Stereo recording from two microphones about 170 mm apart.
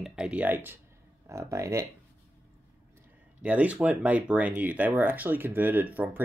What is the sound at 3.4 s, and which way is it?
Speech, 10° right (ahead or behind).